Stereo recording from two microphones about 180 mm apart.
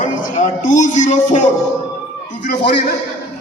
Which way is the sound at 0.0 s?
45° left (ahead or behind).